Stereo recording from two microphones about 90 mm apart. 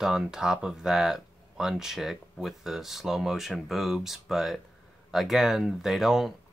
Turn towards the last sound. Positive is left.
turn(degrees=-5)  # may be behind; listen again after turning